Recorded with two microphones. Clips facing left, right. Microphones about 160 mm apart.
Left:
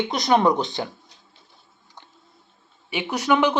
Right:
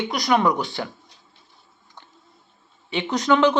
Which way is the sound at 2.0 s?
15° left (ahead or behind).